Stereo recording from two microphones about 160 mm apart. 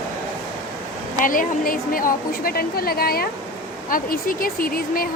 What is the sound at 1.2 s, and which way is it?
A woman's voice, 60° left (ahead or behind).